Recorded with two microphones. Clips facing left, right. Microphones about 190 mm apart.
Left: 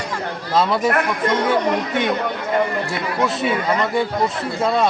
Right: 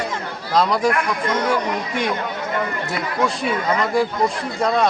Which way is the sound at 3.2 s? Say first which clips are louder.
Left 1 dB; centre (ahead or behind).